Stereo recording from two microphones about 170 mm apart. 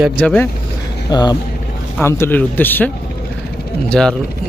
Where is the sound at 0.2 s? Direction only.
10° left (ahead or behind).